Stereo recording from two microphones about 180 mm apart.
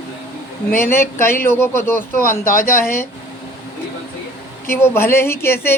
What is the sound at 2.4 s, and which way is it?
Speech, 50° left (ahead or behind).